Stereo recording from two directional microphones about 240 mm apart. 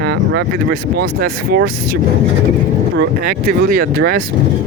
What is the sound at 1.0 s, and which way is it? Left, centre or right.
Speech, right.